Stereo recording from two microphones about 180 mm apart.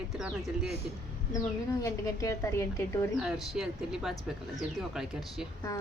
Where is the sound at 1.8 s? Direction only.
15° left (ahead or behind).